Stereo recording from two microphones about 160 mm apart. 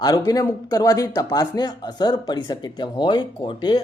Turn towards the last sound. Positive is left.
turn(degrees=25)  # may be behind; listen again after turning